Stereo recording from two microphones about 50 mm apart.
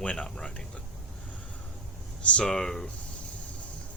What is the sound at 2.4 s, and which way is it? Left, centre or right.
Speech, centre.